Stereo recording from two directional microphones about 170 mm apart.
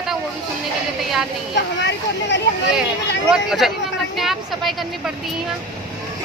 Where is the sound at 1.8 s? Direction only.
90° left.